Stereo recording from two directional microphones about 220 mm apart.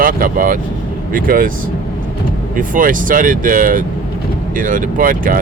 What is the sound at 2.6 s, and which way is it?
Speech, 40° right (ahead or behind).